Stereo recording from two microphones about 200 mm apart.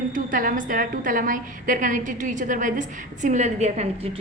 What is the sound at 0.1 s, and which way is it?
A woman's voice, 45° right (ahead or behind).